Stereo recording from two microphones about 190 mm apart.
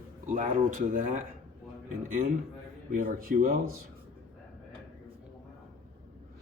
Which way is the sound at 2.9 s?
50° right (ahead or behind).